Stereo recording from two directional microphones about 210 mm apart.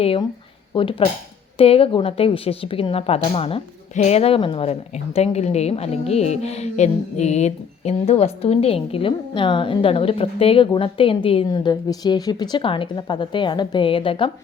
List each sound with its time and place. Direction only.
0.0 s a woman's voice: 25° left (ahead or behind)